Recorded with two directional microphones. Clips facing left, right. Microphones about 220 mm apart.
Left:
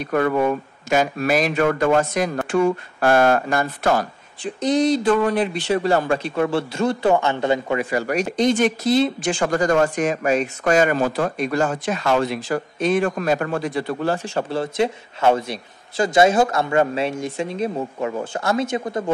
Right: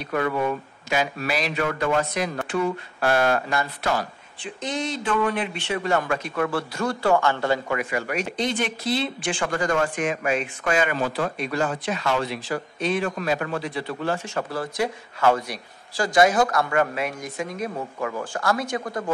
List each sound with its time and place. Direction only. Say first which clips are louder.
0.0 s speech: left 5 dB; 50° left (ahead or behind)
4.6 s speech: left 11 dB; 35° left (ahead or behind)